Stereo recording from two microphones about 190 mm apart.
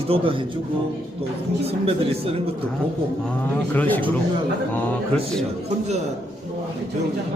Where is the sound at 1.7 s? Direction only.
30° right (ahead or behind).